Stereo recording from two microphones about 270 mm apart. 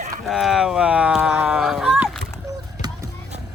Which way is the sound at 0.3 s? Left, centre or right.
Centre.